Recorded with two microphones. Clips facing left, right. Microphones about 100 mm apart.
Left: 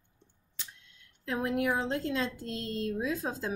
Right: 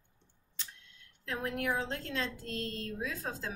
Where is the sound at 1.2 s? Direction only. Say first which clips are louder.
Left 6 dB; 10° left (ahead or behind).